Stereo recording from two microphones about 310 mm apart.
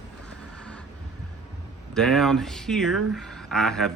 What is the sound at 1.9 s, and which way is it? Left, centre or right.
Speech, centre.